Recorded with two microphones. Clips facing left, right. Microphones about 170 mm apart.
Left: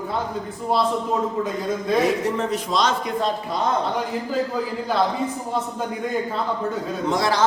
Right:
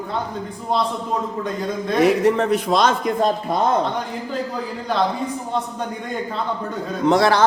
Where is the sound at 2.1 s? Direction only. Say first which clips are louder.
Right 6 dB; 65° right (ahead or behind).